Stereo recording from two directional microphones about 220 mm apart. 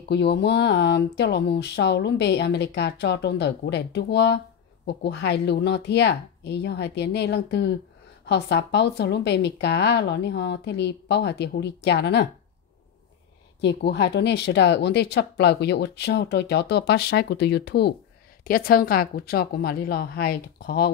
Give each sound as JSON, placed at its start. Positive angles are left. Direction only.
{"t": 0.1, "sound": "a woman's voice", "side_deg": 50}
{"t": 13.6, "sound": "a woman's voice", "side_deg": 50}